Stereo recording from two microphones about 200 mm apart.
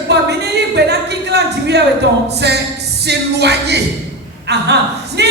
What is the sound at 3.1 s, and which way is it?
Music, 55° right (ahead or behind).